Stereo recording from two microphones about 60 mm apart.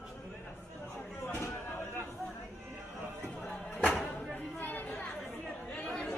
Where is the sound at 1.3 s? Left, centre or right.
Left.